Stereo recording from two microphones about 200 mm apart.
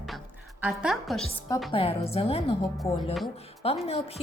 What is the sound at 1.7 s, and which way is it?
Speech, 30° left (ahead or behind).